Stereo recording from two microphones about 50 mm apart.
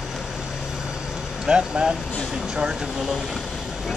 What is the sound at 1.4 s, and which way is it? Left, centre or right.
Speech, centre.